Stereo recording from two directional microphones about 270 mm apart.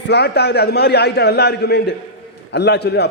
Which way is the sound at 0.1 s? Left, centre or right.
Left.